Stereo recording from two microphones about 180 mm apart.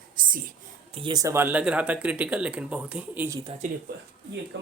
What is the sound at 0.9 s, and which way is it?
Speech, 25° right (ahead or behind).